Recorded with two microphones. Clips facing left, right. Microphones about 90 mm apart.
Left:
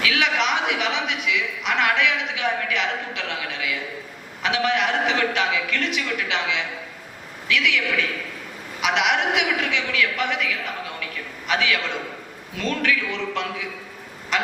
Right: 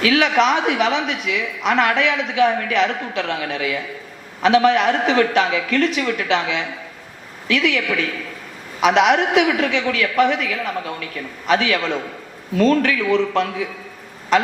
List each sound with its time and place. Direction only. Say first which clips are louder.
0.0 s a woman's voice: right 6 dB; 40° right (ahead or behind)
8.8 s a woman's voice: right 7 dB; 40° right (ahead or behind)